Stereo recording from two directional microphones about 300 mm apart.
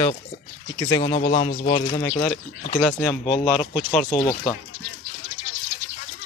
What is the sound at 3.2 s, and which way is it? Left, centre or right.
Speech, centre.